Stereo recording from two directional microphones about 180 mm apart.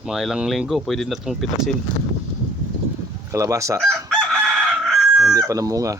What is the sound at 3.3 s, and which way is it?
Speech, 15° right (ahead or behind).